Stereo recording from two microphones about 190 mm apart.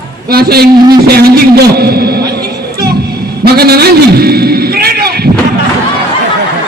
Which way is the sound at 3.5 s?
55° right (ahead or behind).